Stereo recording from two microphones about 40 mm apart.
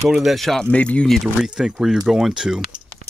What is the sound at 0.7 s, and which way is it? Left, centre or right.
Speech, left.